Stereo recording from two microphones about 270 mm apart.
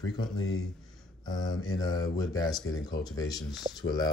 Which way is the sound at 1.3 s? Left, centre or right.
Centre.